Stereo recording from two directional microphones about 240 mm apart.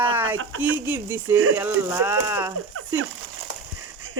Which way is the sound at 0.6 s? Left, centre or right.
Centre.